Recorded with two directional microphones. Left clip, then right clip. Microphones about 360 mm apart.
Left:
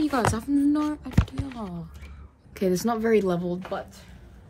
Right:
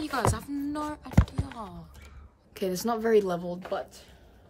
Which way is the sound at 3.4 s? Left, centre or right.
Left.